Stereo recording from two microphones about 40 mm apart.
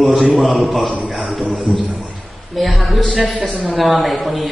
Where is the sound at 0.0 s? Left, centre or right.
Centre.